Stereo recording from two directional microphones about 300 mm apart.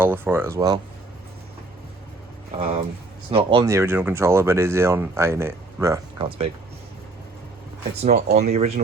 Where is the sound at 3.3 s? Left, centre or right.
Centre.